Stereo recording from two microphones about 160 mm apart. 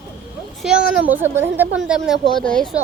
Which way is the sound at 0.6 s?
5° right (ahead or behind).